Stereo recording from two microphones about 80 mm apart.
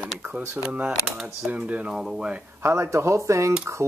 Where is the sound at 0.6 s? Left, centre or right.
Centre.